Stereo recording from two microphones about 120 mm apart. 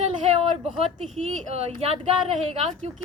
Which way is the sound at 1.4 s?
60° right (ahead or behind).